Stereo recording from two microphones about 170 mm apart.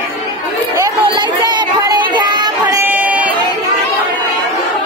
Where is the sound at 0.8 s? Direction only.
25° right (ahead or behind).